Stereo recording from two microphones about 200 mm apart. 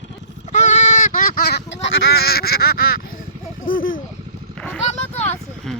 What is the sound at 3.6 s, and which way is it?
Speech, 45° left (ahead or behind).